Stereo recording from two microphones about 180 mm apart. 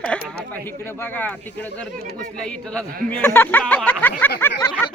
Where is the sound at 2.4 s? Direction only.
5° left (ahead or behind).